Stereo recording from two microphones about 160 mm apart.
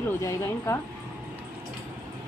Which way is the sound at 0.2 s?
15° left (ahead or behind).